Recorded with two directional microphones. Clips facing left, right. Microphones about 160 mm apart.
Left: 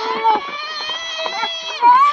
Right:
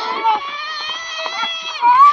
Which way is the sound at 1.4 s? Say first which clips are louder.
Left 2 dB; 55° left (ahead or behind).